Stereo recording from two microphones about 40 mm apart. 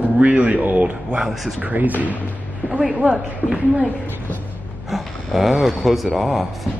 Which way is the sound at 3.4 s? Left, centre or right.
Left.